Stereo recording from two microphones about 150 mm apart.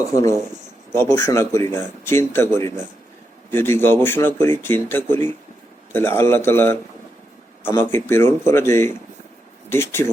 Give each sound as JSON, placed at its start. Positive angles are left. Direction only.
{"t": 0.0, "sound": "speech", "side_deg": 20}